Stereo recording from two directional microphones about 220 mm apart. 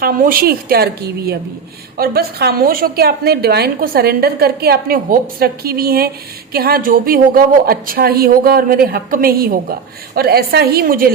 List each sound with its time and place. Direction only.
0.0 s a woman's voice: 40° right (ahead or behind)
2.0 s a woman's voice: 45° right (ahead or behind)